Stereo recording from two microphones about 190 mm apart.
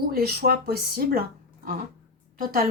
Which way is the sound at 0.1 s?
55° right (ahead or behind).